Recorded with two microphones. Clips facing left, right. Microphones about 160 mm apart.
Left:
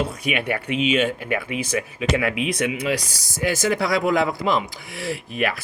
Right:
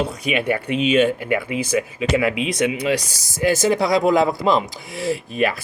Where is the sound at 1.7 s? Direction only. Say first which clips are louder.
Right 3 dB; 25° right (ahead or behind).